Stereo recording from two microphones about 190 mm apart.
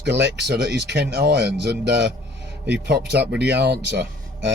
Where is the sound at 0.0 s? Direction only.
65° right (ahead or behind).